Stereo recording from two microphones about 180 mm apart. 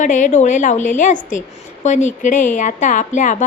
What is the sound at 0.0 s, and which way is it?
A woman's voice, 45° left (ahead or behind).